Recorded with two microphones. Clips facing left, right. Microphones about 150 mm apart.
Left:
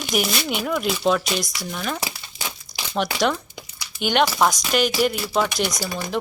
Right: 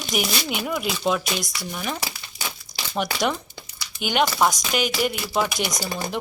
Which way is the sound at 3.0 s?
5° right (ahead or behind).